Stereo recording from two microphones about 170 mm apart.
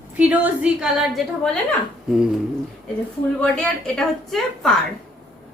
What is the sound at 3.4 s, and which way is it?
A woman's voice, 5° left (ahead or behind).